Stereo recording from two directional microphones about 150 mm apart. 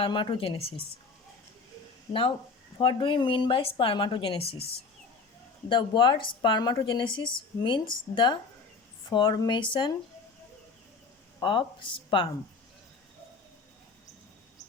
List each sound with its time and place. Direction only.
0.0 s a woman's voice: 35° left (ahead or behind)
2.7 s a woman's voice: 35° left (ahead or behind)
5.6 s a woman's voice: 30° left (ahead or behind)
11.3 s a woman's voice: 35° left (ahead or behind)